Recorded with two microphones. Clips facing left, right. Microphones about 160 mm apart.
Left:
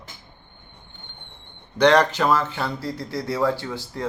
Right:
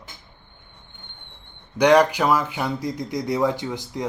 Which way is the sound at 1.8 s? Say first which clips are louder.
Right 1 dB; 10° right (ahead or behind).